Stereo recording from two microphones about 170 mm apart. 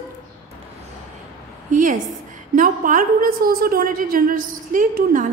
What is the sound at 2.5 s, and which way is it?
A woman's voice, 50° right (ahead or behind).